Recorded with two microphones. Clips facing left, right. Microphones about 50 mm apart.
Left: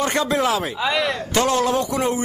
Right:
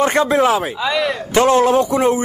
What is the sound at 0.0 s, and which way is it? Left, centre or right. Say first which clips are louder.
Speech: right 6 dB; right.